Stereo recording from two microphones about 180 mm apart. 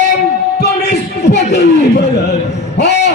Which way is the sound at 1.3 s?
70° left (ahead or behind).